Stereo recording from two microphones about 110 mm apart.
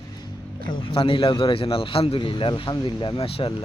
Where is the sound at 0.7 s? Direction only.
50° left (ahead or behind).